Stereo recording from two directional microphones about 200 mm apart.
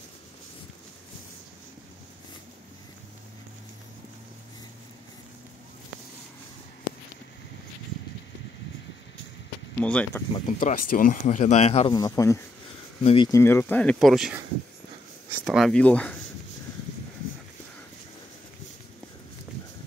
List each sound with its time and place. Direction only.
9.8 s speech: 5° left (ahead or behind)
10.4 s speech: 40° left (ahead or behind)
12.0 s speech: 15° left (ahead or behind)
13.4 s speech: 10° left (ahead or behind)